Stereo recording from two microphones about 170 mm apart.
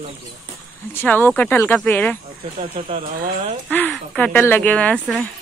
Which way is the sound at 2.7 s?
50° right (ahead or behind).